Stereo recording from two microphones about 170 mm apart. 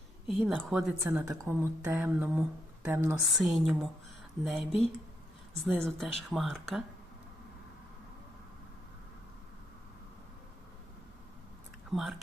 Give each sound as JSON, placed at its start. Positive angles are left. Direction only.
{"t": 0.3, "sound": "speech", "side_deg": 0}
{"t": 1.0, "sound": "speech", "side_deg": -15}
{"t": 3.3, "sound": "speech", "side_deg": 0}
{"t": 11.9, "sound": "speech", "side_deg": 0}